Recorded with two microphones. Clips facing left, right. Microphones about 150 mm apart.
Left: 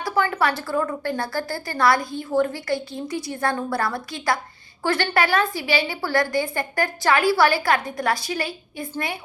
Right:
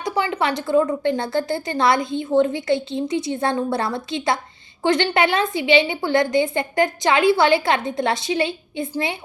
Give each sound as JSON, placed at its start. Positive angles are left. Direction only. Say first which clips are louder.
{"t": 0.0, "sound": "a woman's voice", "louder": "even", "side_deg": -20}